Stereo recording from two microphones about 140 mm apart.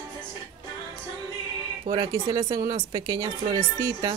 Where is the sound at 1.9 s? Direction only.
30° right (ahead or behind).